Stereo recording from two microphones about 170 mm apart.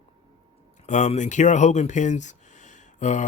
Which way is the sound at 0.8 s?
45° left (ahead or behind).